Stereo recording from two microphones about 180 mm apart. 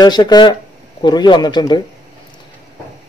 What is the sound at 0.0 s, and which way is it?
A man's voice, 25° left (ahead or behind).